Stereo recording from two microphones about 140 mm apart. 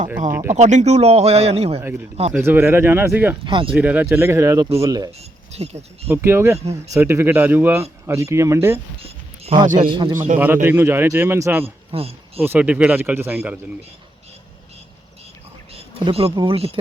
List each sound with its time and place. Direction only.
0.5 s speech: 60° right (ahead or behind)
2.4 s speech: 15° right (ahead or behind)
3.4 s speech: 35° right (ahead or behind)
3.7 s speech: 10° right (ahead or behind); by 5.1 s 25° right (ahead or behind)
5.5 s speech: 50° right (ahead or behind)
6.1 s speech: 15° right (ahead or behind)
9.0 s music: 45° right (ahead or behind)
9.8 s speech: 35° right (ahead or behind)
10.3 s speech: 15° right (ahead or behind)
11.6 s speech: 45° right (ahead or behind)
12.4 s speech: 10° right (ahead or behind)
15.7 s a sound: 45° right (ahead or behind)
16.3 s speech: 35° right (ahead or behind)